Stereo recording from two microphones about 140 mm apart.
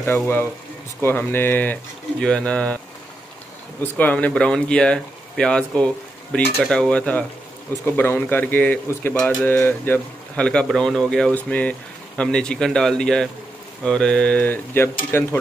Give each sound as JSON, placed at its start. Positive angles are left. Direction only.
{"t": 1.0, "sound": "speech", "side_deg": 15}
{"t": 4.0, "sound": "a man's voice", "side_deg": 10}